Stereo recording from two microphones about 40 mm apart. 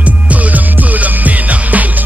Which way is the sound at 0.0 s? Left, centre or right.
Right.